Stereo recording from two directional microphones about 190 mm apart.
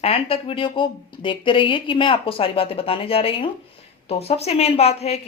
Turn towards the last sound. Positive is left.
turn(degrees=35)  # may be behind; listen again after turning